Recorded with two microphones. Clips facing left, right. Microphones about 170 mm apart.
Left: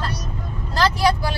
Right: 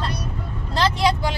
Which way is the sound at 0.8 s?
25° right (ahead or behind).